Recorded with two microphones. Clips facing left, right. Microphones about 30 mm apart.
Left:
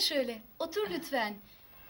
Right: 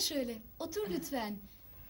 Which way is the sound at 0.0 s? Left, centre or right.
Left.